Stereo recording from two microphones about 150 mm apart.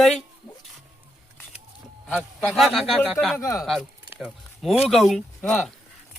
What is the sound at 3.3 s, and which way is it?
Speech, 20° left (ahead or behind).